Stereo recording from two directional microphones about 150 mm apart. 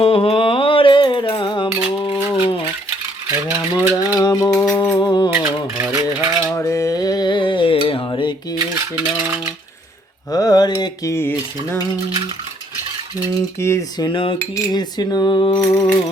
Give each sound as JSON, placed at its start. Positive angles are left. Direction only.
{"t": 0.0, "sound": "a sound", "side_deg": 40}
{"t": 3.2, "sound": "rattle", "side_deg": -15}
{"t": 4.2, "sound": "music", "side_deg": 25}
{"t": 5.3, "sound": "a sound", "side_deg": -15}
{"t": 6.5, "sound": "a sound", "side_deg": 20}
{"t": 8.7, "sound": "coin", "side_deg": -10}
{"t": 10.3, "sound": "cutlery", "side_deg": 25}
{"t": 13.6, "sound": "cutlery", "side_deg": 20}
{"t": 14.1, "sound": "cutlery", "side_deg": 35}
{"t": 14.3, "sound": "cutlery", "side_deg": 25}